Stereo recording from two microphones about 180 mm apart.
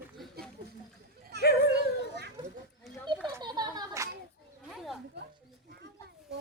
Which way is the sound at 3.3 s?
20° right (ahead or behind).